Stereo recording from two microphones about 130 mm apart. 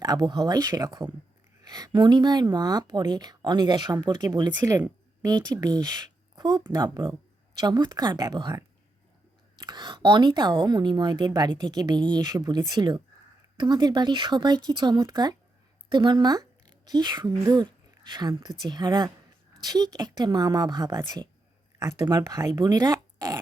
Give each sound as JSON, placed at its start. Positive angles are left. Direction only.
{"t": 0.0, "sound": "a woman's voice", "side_deg": -30}